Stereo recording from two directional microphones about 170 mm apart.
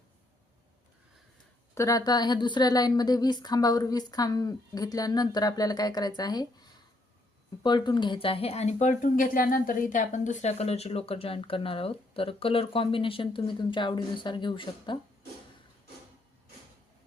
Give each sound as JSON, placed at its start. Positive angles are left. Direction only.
{"t": 1.7, "sound": "speech", "side_deg": 20}